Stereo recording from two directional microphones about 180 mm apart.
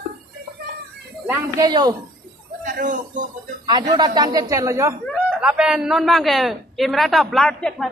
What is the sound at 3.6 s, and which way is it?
Speech, 25° right (ahead or behind).